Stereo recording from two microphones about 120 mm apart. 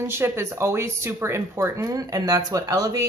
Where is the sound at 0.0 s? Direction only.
20° right (ahead or behind).